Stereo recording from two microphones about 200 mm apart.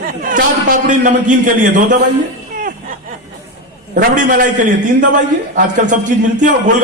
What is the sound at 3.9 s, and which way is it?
A man's voice, 40° right (ahead or behind).